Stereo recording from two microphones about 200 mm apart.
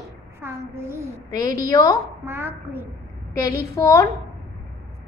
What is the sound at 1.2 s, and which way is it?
Speech, 20° left (ahead or behind).